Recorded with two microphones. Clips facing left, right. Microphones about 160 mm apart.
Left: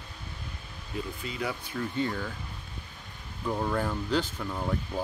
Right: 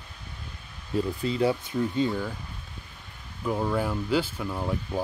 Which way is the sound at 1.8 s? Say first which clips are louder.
Right 5 dB; 15° right (ahead or behind).